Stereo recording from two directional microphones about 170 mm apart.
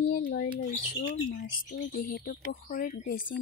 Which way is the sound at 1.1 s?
60° left (ahead or behind).